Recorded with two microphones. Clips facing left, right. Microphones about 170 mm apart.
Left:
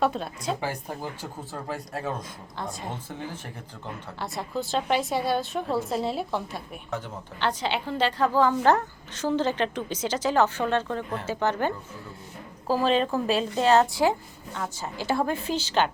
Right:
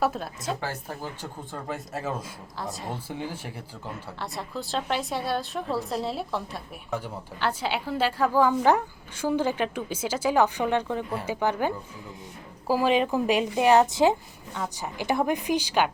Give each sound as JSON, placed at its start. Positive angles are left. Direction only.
{"t": 0.0, "sound": "speech", "side_deg": 0}
{"t": 0.6, "sound": "speech", "side_deg": 15}
{"t": 1.5, "sound": "a woman's voice", "side_deg": 0}